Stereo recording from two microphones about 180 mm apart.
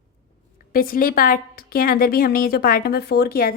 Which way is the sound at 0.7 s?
55° left (ahead or behind).